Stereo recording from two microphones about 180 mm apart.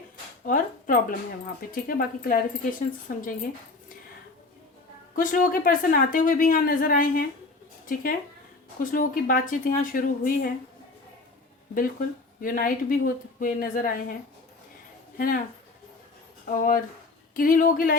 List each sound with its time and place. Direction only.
0.4 s a sound: 50° left (ahead or behind)
1.7 s speech: 50° left (ahead or behind)
5.1 s speech: 50° left (ahead or behind)
8.8 s speech: 50° left (ahead or behind)
11.7 s speech: 50° left (ahead or behind)
16.5 s speech: 50° left (ahead or behind)